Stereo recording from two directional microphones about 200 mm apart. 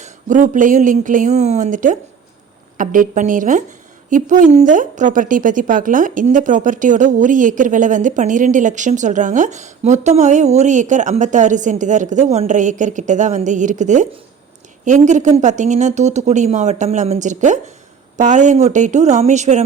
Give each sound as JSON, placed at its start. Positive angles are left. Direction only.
{"t": 0.0, "sound": "a woman's voice", "side_deg": -40}